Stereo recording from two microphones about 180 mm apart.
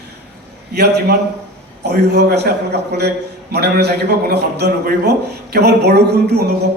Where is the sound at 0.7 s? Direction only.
65° right (ahead or behind).